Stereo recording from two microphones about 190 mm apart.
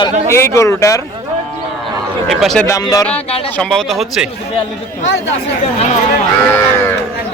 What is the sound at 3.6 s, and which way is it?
Speech, 5° left (ahead or behind).